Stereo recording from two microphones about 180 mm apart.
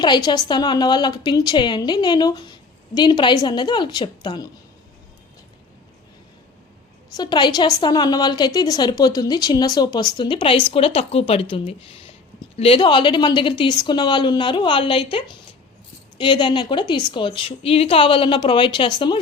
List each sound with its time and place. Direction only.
0.0 s a woman's voice: 25° left (ahead or behind)
7.1 s a woman's voice: 25° left (ahead or behind)
11.9 s a sound: 30° left (ahead or behind)
12.5 s a woman's voice: 30° left (ahead or behind)